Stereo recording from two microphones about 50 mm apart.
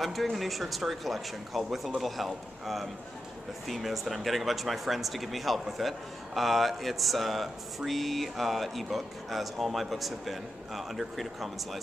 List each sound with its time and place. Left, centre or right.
0.0 s speech: centre